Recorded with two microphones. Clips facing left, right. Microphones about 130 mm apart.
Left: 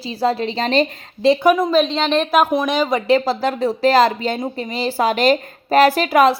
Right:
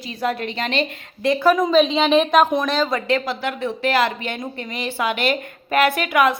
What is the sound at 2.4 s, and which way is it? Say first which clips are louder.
Speech: left 1 dB; 10° left (ahead or behind).